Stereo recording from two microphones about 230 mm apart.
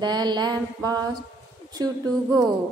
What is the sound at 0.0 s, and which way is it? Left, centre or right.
Speech, centre.